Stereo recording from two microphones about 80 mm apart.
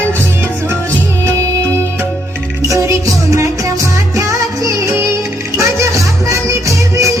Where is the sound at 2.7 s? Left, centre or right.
Right.